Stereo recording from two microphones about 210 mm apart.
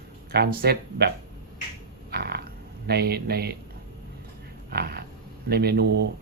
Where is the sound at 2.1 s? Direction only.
50° right (ahead or behind).